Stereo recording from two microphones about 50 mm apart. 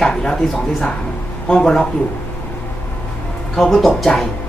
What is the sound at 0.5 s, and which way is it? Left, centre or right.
Speech, left.